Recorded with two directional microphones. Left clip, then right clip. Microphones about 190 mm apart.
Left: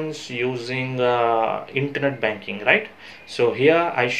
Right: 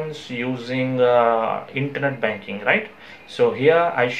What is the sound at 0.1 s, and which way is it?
Speech, 40° left (ahead or behind).